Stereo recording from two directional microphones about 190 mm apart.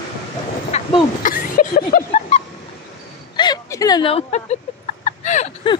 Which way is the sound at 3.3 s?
20° left (ahead or behind).